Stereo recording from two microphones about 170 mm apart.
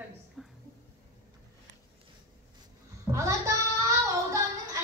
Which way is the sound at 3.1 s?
20° right (ahead or behind).